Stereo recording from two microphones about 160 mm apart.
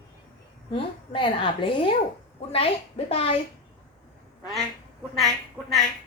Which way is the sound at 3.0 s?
40° left (ahead or behind).